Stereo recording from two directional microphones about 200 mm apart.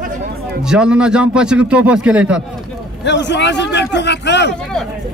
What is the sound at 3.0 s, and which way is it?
A man's voice, 60° left (ahead or behind).